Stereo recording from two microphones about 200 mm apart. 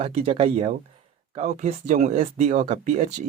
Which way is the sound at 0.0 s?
30° right (ahead or behind).